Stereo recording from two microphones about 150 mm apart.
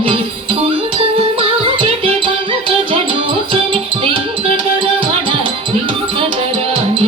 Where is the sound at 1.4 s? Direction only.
35° right (ahead or behind).